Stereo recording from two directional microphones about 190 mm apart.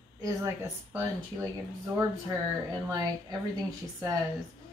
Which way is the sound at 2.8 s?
20° right (ahead or behind).